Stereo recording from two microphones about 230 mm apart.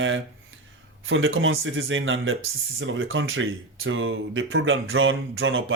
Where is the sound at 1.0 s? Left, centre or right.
Right.